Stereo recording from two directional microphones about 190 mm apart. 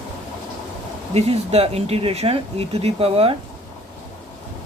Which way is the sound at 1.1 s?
35° right (ahead or behind).